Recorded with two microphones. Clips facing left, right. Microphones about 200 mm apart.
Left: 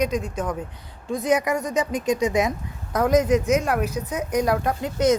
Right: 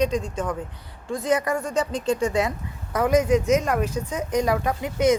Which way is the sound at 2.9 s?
5° right (ahead or behind).